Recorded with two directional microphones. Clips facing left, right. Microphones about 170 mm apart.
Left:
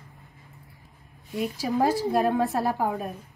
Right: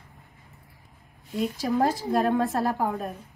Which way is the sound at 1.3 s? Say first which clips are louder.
Right 1 dB; 15° left (ahead or behind).